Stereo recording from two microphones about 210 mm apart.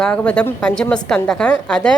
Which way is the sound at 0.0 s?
5° left (ahead or behind).